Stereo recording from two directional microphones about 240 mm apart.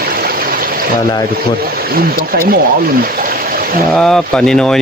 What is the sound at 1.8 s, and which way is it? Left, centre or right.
Speech, right.